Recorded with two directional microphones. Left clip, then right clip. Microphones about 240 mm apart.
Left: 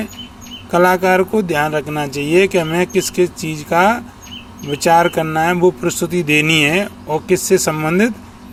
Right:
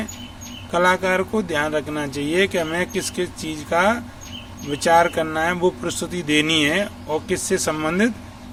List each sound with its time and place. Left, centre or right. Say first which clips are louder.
0.7 s speech: left 6 dB; left